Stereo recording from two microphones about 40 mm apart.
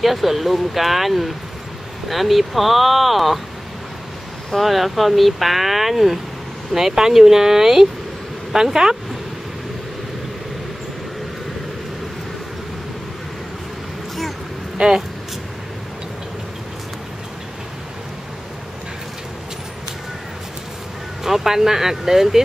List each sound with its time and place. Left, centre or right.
0.0 s speech: centre
4.6 s speech: centre
14.8 s speech: right
21.2 s speech: centre